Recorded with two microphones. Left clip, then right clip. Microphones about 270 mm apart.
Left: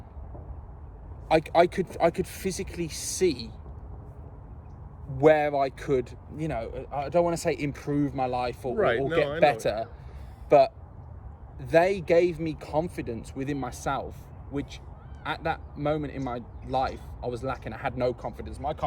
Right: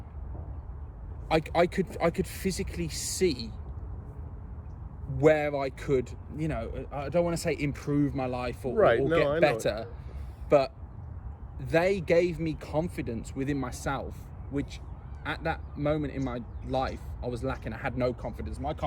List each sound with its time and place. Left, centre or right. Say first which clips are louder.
1.3 s a man's voice: left 4 dB; centre
5.1 s a man's voice: left 3 dB; centre
8.8 s speech: right 2 dB; centre
9.4 s a man's voice: left 3 dB; centre